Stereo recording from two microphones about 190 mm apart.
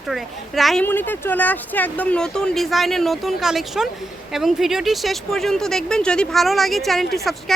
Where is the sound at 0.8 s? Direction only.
10° left (ahead or behind).